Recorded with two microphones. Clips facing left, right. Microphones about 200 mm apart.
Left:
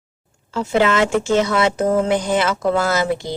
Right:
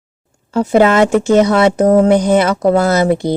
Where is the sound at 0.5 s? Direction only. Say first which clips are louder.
Right 7 dB; 45° right (ahead or behind).